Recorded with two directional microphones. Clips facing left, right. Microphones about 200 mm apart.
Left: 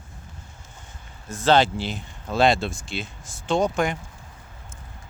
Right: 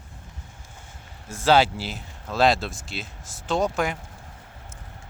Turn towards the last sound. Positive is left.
turn(degrees=-5)  # may be behind; listen again after turning